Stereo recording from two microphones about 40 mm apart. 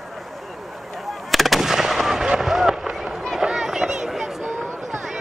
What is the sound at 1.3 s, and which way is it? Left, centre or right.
Gunshot, centre.